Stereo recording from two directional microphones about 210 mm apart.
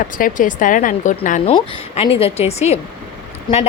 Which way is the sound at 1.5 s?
25° left (ahead or behind).